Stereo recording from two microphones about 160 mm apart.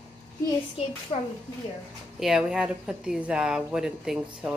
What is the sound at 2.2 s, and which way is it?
Speech, 5° right (ahead or behind).